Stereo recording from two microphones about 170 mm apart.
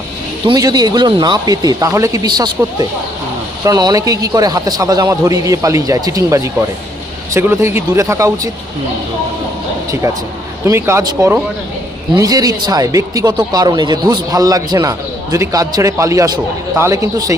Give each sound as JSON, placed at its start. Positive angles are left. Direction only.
{"t": 0.4, "sound": "speech", "side_deg": -25}
{"t": 3.6, "sound": "speech", "side_deg": -25}
{"t": 10.7, "sound": "speech", "side_deg": -15}